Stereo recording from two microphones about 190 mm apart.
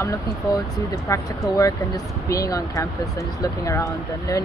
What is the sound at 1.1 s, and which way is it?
Speech, 20° left (ahead or behind).